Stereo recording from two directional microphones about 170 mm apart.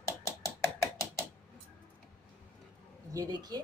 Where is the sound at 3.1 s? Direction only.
20° right (ahead or behind).